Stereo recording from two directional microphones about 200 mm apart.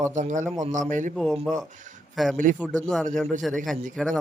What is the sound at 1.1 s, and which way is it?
Speech, centre (ahead or behind).